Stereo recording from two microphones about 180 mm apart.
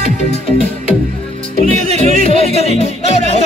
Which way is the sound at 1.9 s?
40° right (ahead or behind).